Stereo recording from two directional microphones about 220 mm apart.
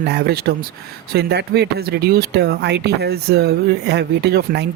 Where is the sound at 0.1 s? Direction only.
45° right (ahead or behind).